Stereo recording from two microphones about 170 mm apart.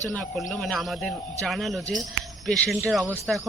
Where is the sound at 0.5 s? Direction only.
Centre (ahead or behind).